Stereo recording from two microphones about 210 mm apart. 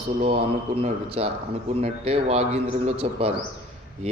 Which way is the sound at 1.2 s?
30° right (ahead or behind).